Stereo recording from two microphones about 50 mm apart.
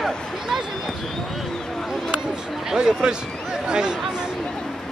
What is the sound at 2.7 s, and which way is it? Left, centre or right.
Speech, centre.